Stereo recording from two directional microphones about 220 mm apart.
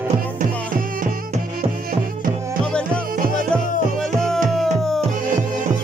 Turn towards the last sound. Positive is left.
turn(degrees=0)  # may be behind; listen again after turning